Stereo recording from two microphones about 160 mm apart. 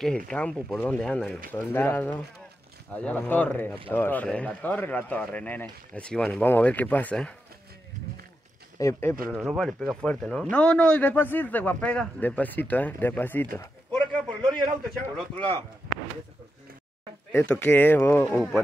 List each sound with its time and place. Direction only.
0.3 s a man's voice: 5° left (ahead or behind)
8.7 s speech: 20° left (ahead or behind)
9.4 s a man's voice: centre (ahead or behind)
17.3 s a man's voice: 15° left (ahead or behind)
18.3 s speech: centre (ahead or behind)